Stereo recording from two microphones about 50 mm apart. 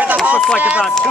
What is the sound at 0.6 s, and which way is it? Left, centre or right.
Speech, right.